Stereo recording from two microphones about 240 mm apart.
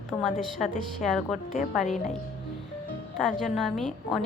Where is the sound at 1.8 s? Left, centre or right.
Left.